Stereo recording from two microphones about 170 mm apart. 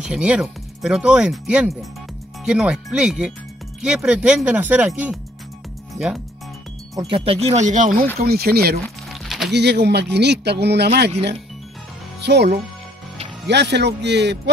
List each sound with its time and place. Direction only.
0.0 s speech: 5° right (ahead or behind)
7.0 s speech: 30° right (ahead or behind); by 8.1 s 55° right (ahead or behind)
8.2 s speech: 65° right (ahead or behind)
9.1 s a sound: centre (ahead or behind)
9.5 s speech: 80° right
12.2 s speech: 80° right
13.5 s speech: 85° right